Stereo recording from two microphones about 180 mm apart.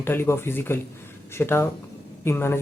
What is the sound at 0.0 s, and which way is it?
Speech, 10° left (ahead or behind).